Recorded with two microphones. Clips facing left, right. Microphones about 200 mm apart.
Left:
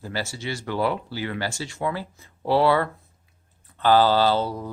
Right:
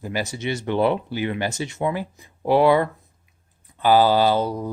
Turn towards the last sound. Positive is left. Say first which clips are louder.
# right 2 dB
turn(degrees=-15)  # may be behind; listen again after turning